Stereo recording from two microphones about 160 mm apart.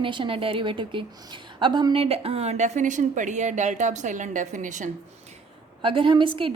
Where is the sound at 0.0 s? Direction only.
30° right (ahead or behind); by 4.9 s 50° right (ahead or behind).